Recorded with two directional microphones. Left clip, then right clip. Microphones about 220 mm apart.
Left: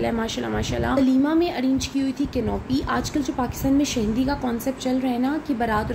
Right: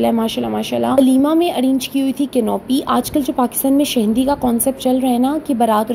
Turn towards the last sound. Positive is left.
turn(degrees=-30)  # may be behind; listen again after turning